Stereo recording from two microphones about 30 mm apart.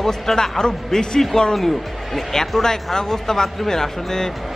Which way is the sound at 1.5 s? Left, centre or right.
Centre.